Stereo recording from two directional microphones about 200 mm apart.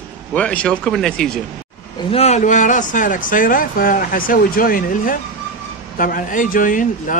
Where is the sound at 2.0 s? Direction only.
30° left (ahead or behind).